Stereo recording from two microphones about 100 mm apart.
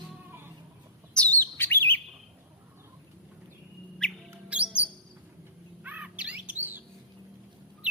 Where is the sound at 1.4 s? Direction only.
20° left (ahead or behind).